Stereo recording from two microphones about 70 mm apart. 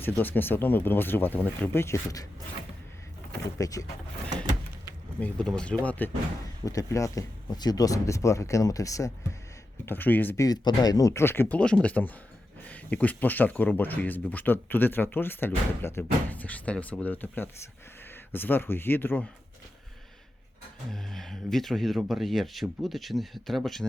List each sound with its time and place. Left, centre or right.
0.0 s speech: left
3.6 s speech: left
5.2 s speech: centre
6.7 s speech: left
7.5 s speech: left
9.8 s speech: left
10.3 s speech: left
10.6 s speech: left
11.1 s speech: left
11.5 s speech: centre
20.9 s speech: centre